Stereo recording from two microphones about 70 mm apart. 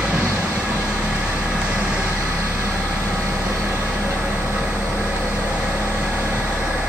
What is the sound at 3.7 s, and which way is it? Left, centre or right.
Vehicle, right.